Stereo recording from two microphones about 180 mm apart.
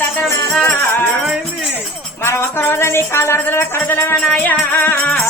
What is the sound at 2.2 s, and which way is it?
Music, 15° left (ahead or behind).